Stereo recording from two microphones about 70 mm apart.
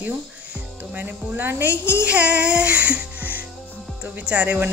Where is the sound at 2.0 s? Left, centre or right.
Centre.